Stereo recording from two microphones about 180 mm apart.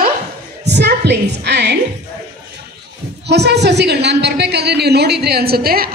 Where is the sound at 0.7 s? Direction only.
70° right (ahead or behind).